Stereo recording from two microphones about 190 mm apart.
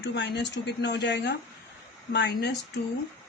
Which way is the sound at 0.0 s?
65° left (ahead or behind).